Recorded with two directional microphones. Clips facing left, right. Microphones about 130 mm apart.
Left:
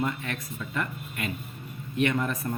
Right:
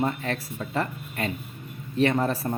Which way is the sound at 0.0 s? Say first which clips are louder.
Right 4 dB; 35° right (ahead or behind).